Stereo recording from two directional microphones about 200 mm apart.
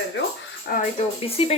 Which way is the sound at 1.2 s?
30° left (ahead or behind).